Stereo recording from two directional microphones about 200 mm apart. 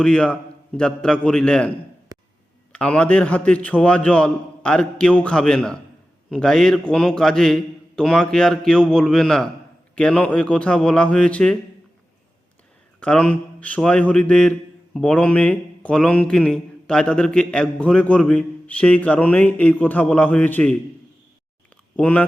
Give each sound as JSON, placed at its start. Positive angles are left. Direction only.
{"t": 0.0, "sound": "a man's voice", "side_deg": 5}
{"t": 2.1, "sound": "a sound", "side_deg": -15}
{"t": 2.7, "sound": "a man's voice", "side_deg": 5}
{"t": 13.0, "sound": "a man's voice", "side_deg": 5}
{"t": 21.9, "sound": "a man's voice", "side_deg": 5}